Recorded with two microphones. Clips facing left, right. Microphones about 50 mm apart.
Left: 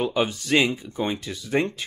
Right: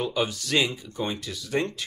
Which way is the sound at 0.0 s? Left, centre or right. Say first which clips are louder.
Left 3 dB; left.